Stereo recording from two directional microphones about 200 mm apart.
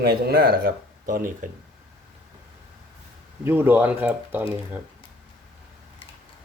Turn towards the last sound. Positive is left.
turn(degrees=-10)  # may be behind; listen again after turning